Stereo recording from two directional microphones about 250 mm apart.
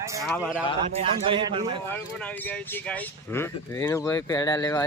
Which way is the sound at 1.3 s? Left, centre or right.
Centre.